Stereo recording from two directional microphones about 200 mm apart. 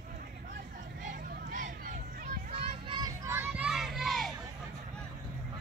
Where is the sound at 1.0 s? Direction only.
40° right (ahead or behind).